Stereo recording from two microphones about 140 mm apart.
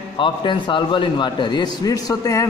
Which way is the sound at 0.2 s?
35° left (ahead or behind).